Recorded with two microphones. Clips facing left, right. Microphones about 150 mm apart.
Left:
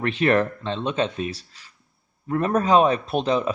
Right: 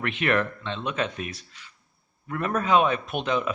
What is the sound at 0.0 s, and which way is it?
Speech, 35° left (ahead or behind).